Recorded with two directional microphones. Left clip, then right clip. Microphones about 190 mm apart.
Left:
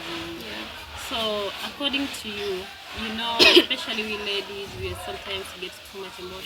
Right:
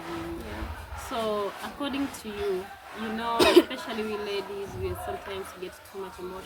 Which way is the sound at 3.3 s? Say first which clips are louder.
Left 4 dB; 20° right (ahead or behind).